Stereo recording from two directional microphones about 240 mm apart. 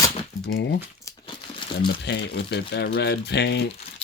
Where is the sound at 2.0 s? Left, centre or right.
Left.